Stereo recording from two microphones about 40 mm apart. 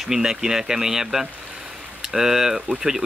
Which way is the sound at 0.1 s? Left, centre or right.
Centre.